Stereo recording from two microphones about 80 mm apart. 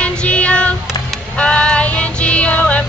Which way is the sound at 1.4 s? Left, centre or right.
Centre.